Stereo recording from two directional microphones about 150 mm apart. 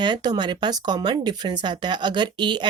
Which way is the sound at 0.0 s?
30° right (ahead or behind).